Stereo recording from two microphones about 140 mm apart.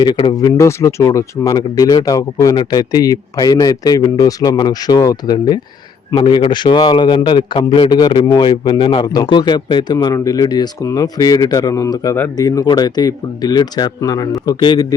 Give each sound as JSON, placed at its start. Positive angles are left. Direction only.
{"t": 0.0, "sound": "a man's voice", "side_deg": 30}